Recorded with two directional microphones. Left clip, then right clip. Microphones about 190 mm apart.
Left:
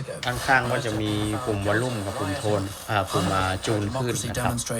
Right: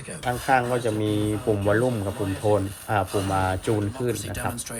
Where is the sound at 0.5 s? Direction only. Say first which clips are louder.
Even; 5° right (ahead or behind).